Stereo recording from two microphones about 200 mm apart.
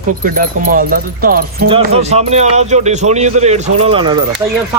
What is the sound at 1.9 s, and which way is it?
A man's voice, 35° right (ahead or behind).